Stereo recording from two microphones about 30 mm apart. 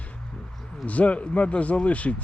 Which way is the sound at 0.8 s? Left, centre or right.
Left.